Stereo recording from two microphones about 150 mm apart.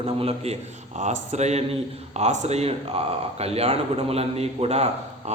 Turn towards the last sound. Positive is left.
turn(degrees=-45)  # may be behind; listen again after turning